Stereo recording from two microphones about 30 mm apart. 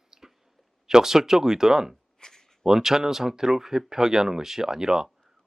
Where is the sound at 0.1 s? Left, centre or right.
Centre.